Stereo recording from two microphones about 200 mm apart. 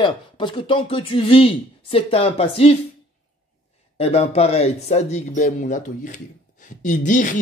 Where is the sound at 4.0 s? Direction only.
30° left (ahead or behind).